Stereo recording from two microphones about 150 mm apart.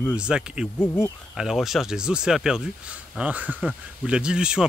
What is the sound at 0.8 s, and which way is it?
Speech, 10° left (ahead or behind).